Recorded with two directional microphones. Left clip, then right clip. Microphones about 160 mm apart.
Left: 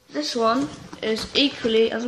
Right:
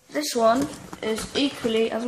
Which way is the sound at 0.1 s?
30° right (ahead or behind).